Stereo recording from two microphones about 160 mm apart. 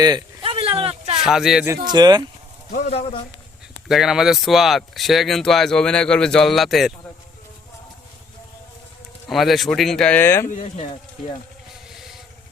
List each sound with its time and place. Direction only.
0.0 s a sound: 30° right (ahead or behind)
1.2 s speech: 5° right (ahead or behind)
1.9 s speech: 25° right (ahead or behind)
2.9 s speech: 35° left (ahead or behind)
3.8 s speech: centre (ahead or behind)
9.3 s speech: centre (ahead or behind); by 10.5 s 15° left (ahead or behind)
10.5 s speech: 50° left (ahead or behind)
11.7 s vehicle: centre (ahead or behind)